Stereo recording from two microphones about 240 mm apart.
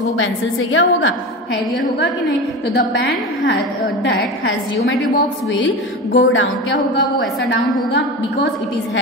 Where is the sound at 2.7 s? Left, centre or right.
Left.